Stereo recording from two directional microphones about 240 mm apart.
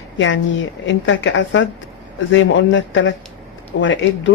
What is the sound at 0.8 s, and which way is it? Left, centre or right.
A woman's voice, left.